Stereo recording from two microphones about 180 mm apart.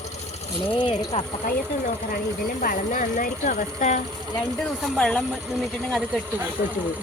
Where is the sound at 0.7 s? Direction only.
25° left (ahead or behind).